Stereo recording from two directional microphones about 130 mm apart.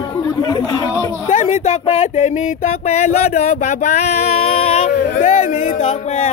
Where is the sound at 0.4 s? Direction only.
30° left (ahead or behind).